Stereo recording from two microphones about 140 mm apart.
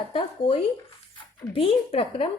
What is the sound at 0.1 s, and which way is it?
A woman's voice, 45° left (ahead or behind).